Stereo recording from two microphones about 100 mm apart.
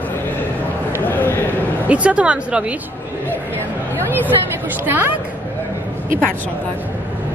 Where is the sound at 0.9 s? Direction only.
20° left (ahead or behind).